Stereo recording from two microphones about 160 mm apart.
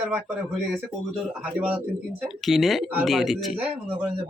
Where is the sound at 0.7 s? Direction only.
5° right (ahead or behind).